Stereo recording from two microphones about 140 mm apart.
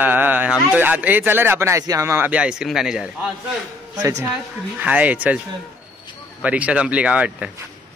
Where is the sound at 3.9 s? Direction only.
20° right (ahead or behind).